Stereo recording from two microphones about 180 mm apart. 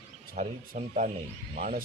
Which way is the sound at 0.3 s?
45° right (ahead or behind).